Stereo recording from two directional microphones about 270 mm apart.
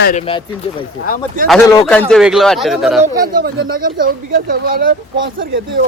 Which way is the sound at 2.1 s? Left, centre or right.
Centre.